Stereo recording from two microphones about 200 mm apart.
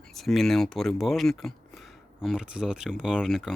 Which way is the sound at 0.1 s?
Centre (ahead or behind).